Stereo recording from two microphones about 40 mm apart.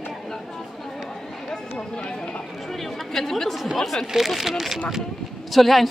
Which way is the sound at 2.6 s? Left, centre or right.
Centre.